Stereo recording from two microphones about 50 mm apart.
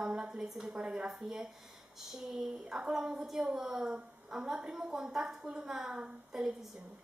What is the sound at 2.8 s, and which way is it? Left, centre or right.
A woman's voice, centre.